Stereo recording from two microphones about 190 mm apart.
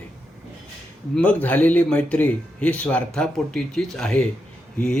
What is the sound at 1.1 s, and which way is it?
Speech, 5° left (ahead or behind).